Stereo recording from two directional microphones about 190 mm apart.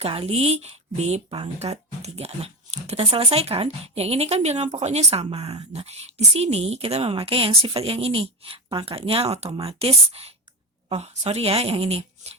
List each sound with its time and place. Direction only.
0.0 s speech: 30° right (ahead or behind)